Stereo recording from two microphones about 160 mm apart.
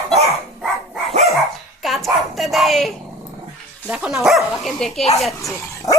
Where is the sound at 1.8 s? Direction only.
Centre (ahead or behind).